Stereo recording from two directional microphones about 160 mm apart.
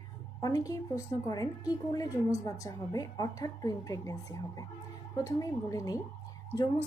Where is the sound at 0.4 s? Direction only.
20° left (ahead or behind).